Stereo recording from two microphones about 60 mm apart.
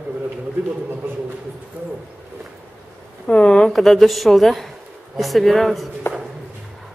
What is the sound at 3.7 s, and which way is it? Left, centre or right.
Speech, centre.